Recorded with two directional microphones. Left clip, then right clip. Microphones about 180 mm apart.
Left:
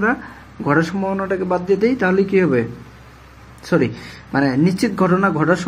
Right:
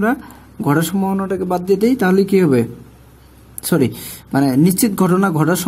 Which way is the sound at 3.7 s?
90° right.